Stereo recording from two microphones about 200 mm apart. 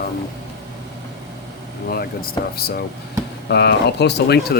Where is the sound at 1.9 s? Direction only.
50° left (ahead or behind).